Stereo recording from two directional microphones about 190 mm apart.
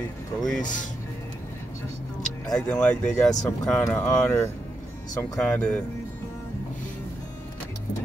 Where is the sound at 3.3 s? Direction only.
20° left (ahead or behind).